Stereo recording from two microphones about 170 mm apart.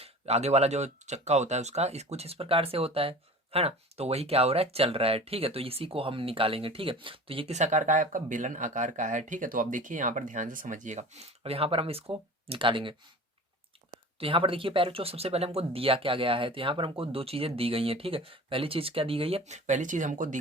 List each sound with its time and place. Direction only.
0.0 s speech: 40° right (ahead or behind)
14.2 s speech: 35° right (ahead or behind); by 20.4 s 50° right (ahead or behind)